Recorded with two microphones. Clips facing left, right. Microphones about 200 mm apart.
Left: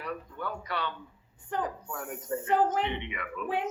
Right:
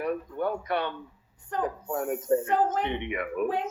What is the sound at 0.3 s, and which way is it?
A man's voice, 55° right (ahead or behind).